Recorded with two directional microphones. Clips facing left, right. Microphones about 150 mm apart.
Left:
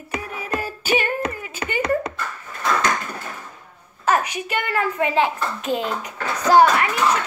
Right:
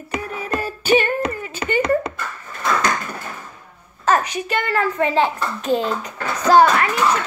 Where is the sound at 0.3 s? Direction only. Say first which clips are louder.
Right 2 dB; 10° left (ahead or behind).